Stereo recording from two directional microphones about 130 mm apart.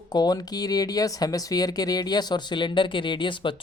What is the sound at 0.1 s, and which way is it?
Speech, 30° left (ahead or behind).